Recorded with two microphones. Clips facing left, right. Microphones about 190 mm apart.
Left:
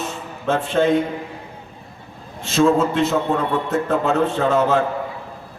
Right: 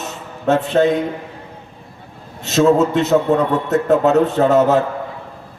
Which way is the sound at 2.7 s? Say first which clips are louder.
Right 5 dB; 40° right (ahead or behind).